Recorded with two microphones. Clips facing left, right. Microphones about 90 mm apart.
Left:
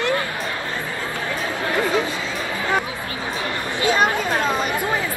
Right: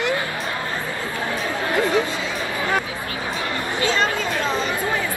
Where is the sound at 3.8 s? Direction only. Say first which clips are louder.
Left 3 dB; 20° left (ahead or behind).